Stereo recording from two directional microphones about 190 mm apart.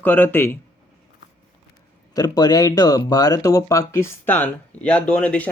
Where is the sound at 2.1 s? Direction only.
20° left (ahead or behind).